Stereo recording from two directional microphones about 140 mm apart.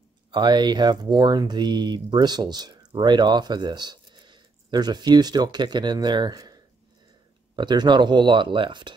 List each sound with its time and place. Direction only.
0.3 s speech: 30° right (ahead or behind)